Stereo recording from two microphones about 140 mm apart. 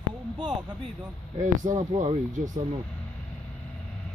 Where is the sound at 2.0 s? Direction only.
60° right (ahead or behind).